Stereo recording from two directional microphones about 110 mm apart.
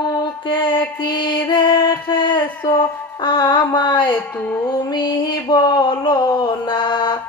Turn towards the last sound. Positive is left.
turn(degrees=45)  # may be behind; listen again after turning